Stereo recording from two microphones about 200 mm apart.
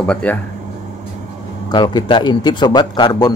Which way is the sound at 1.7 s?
20° left (ahead or behind).